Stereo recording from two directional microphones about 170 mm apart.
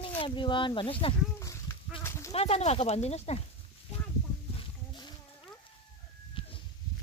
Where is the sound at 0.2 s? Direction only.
30° left (ahead or behind).